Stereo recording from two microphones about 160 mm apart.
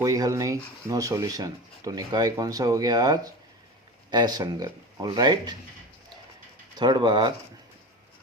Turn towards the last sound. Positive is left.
turn(degrees=-25)  # may be behind; listen again after turning